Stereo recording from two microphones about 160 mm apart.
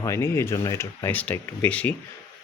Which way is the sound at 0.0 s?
15° left (ahead or behind).